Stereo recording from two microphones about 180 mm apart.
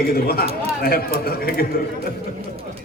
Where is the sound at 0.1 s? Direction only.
55° left (ahead or behind).